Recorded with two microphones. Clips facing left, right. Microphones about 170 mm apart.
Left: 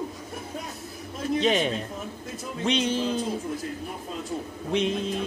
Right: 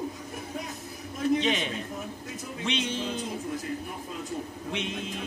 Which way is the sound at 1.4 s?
35° left (ahead or behind).